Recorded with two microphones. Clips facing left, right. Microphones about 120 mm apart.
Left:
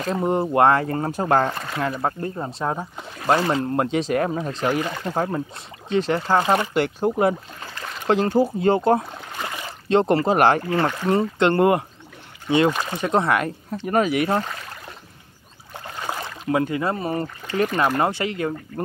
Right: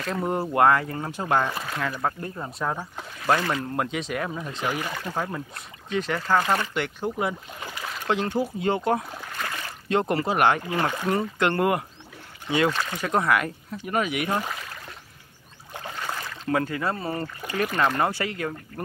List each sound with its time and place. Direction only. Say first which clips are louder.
0.1 s speech: left 5 dB; 20° left (ahead or behind)
0.8 s speech: left 6 dB; 40° left (ahead or behind)
1.8 s speech: left 5 dB; 25° left (ahead or behind)
4.6 s speech: left 6 dB; 20° left (ahead or behind)
5.9 s speech: left 4 dB; 30° left (ahead or behind)
6.7 s speech: left 7 dB; 40° left (ahead or behind)
7.6 s boat: right 3 dB; 10° right (ahead or behind)
8.1 s speech: left 7 dB; 40° left (ahead or behind)
9.4 s a sound: left 3 dB; 20° left (ahead or behind); by 10.6 s 35° left (ahead or behind)
11.1 s speech: left 7 dB; 25° left (ahead or behind)
16.0 s speech: left 5 dB; 20° left (ahead or behind)
17.7 s speech: left 1 dB; 10° left (ahead or behind)
18.0 s speech: left 4 dB; 25° left (ahead or behind)